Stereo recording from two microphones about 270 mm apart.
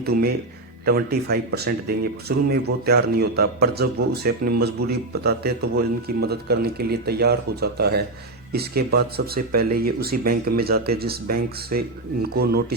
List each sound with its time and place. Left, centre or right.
0.0 s a man's voice: right